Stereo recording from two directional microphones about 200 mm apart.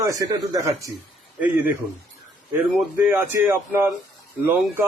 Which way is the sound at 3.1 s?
10° right (ahead or behind).